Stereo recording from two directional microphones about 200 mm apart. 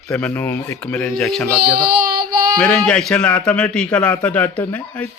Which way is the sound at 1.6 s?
50° right (ahead or behind).